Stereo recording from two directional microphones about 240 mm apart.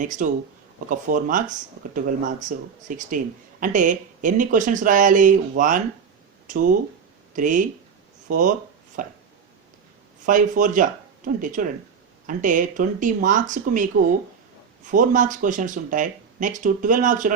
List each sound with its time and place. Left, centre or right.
0.0 s speech: right
10.2 s speech: right
14.8 s speech: right